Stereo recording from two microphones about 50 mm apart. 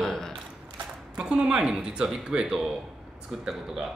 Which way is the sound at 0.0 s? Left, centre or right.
Centre.